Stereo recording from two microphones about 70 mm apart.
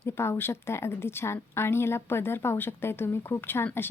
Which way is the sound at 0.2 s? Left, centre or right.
Left.